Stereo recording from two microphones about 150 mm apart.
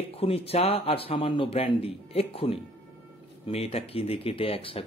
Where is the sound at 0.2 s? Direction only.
40° left (ahead or behind).